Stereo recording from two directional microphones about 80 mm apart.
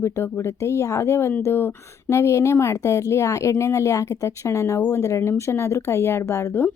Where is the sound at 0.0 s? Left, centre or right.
Left.